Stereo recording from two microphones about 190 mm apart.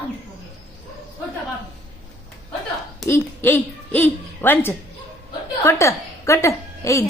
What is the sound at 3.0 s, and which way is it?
A woman's voice, 10° left (ahead or behind).